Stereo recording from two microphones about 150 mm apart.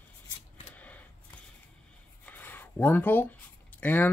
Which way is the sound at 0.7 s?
10° left (ahead or behind).